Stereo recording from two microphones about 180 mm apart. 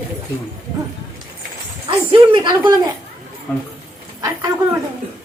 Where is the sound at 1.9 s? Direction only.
25° right (ahead or behind).